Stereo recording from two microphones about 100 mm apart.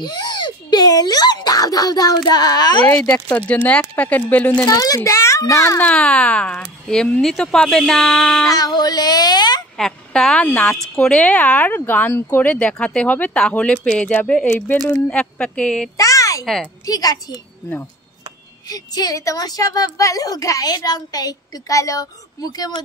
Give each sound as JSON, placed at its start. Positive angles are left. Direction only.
{"t": 0.0, "sound": "a sound", "side_deg": 45}
{"t": 3.3, "sound": "speech", "side_deg": 15}
{"t": 4.6, "sound": "a woman's voice", "side_deg": 35}
{"t": 5.8, "sound": "speech", "side_deg": 10}
{"t": 8.5, "sound": "a woman's voice", "side_deg": 40}
{"t": 9.8, "sound": "speech", "side_deg": 5}
{"t": 10.4, "sound": "speech", "side_deg": 15}
{"t": 16.0, "sound": "a sound", "side_deg": 35}
{"t": 16.8, "sound": "a woman's voice", "side_deg": 40}
{"t": 18.7, "sound": "a woman's voice", "side_deg": 40}